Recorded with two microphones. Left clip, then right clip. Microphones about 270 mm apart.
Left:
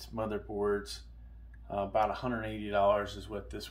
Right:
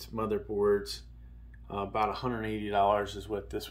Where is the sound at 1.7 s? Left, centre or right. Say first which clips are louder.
Left 1 dB; centre.